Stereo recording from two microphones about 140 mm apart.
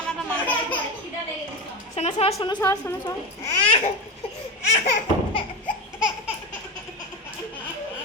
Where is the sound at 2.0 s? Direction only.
50° left (ahead or behind).